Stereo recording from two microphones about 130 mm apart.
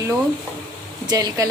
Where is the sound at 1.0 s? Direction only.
30° right (ahead or behind).